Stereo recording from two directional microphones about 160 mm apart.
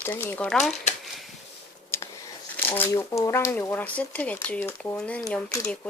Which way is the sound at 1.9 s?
15° left (ahead or behind).